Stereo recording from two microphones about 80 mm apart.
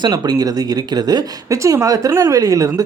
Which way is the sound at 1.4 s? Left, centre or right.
Right.